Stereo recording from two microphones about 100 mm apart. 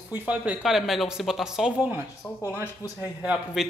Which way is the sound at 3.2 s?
5° right (ahead or behind).